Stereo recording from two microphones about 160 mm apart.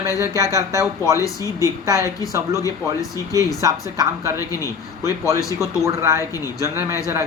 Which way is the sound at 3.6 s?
20° right (ahead or behind).